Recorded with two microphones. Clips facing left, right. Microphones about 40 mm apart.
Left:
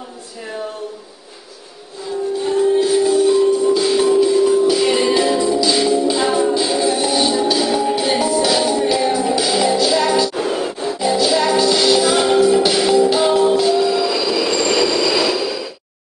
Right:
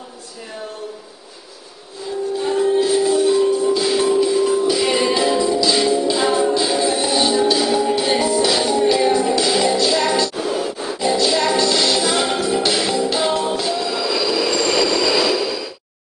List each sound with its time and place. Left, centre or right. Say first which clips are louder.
2.4 s music: left 2 dB; centre
10.3 s music: left 2 dB; left
11.0 s music: left 1 dB; centre